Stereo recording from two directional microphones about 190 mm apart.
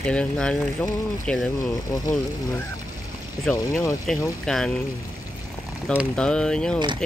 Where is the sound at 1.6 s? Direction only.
20° left (ahead or behind).